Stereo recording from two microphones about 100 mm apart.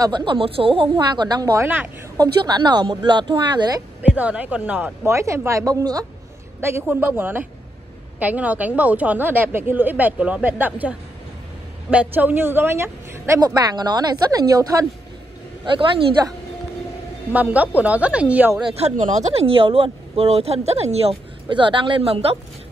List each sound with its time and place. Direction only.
0.0 s speech: 50° right (ahead or behind)
1.6 s speech: 20° right (ahead or behind)
2.1 s speech: 40° right (ahead or behind)
4.1 s speech: 15° right (ahead or behind)
5.0 s a woman's voice: 30° right (ahead or behind)
6.6 s speech: 25° right (ahead or behind)
13.6 s a woman's voice: 45° right (ahead or behind)
17.3 s speech: 15° right (ahead or behind)
18.7 s speech: 90° right